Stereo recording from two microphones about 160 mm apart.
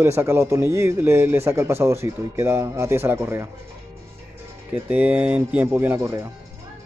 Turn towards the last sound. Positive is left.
turn(degrees=-15)  # may be behind; listen again after turning